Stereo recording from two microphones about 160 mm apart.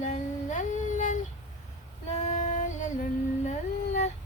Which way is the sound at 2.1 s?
45° left (ahead or behind).